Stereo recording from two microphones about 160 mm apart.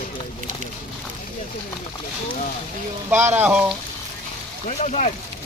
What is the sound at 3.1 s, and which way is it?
Speech, 15° right (ahead or behind).